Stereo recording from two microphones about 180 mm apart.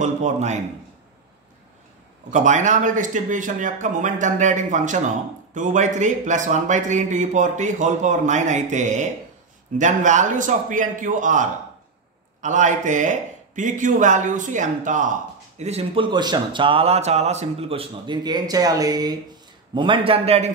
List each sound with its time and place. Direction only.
0.0 s a man's voice: 40° right (ahead or behind)
2.3 s a man's voice: 45° right (ahead or behind)